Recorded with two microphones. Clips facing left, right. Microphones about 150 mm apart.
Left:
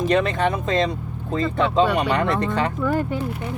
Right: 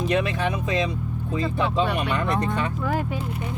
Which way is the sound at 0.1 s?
75° left (ahead or behind).